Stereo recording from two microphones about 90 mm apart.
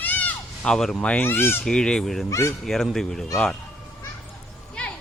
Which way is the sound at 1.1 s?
25° left (ahead or behind).